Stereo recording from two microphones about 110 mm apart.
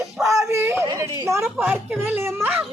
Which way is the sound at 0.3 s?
25° right (ahead or behind).